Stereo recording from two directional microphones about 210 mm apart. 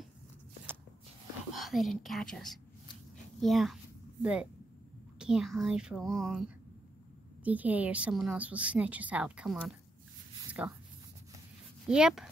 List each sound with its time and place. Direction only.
1.5 s a woman's voice: centre (ahead or behind)
11.9 s speech: 5° right (ahead or behind)